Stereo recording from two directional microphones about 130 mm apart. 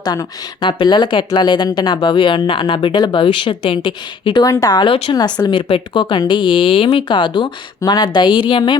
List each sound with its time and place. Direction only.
0.0 s speech: 35° left (ahead or behind)